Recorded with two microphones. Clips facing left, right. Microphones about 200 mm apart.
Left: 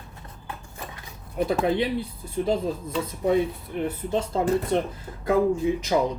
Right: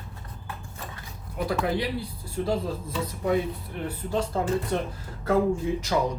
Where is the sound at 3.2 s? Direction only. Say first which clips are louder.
Left 3 dB; 20° left (ahead or behind).